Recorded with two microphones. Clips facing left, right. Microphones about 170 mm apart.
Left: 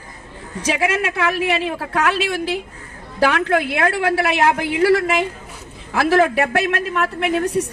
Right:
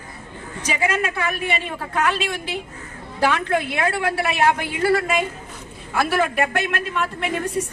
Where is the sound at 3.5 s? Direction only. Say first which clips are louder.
Left 3 dB; 75° left (ahead or behind).